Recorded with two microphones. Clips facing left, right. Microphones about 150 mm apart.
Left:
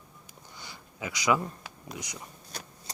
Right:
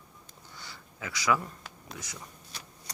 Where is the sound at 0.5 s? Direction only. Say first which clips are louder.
Left 1 dB; 15° left (ahead or behind).